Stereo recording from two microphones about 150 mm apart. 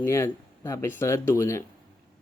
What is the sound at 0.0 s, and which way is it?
Speech, 15° left (ahead or behind).